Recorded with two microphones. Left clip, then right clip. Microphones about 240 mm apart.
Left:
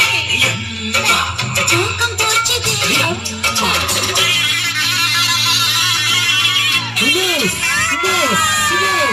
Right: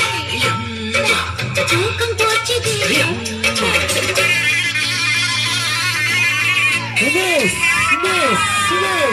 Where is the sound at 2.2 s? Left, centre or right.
Left.